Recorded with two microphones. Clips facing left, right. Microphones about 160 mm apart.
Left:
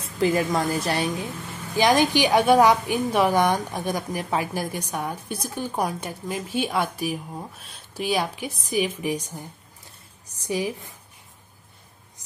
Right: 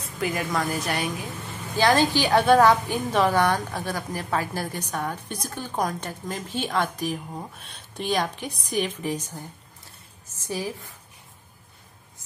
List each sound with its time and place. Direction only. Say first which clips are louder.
0.0 s a woman's voice: left 6 dB; 30° left (ahead or behind)
1.8 s a woman's voice: left 1 dB; 15° left (ahead or behind)